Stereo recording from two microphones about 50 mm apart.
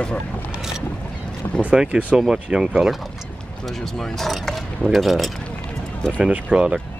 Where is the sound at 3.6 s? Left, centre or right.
Centre.